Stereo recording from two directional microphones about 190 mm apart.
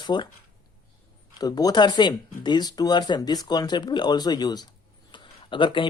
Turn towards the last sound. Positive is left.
turn(degrees=25)  # may be behind; listen again after turning